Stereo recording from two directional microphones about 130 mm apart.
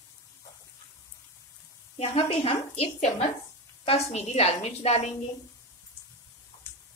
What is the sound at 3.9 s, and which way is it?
Speech, 55° left (ahead or behind).